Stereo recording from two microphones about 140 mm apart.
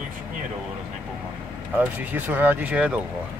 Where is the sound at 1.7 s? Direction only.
15° right (ahead or behind).